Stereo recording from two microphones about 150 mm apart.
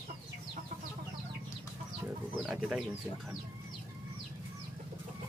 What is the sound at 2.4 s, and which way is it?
Livestock, 5° right (ahead or behind).